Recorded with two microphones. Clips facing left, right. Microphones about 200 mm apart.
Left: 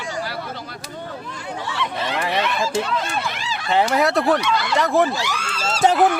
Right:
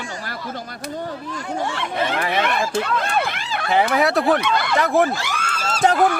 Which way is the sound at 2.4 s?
55° right (ahead or behind).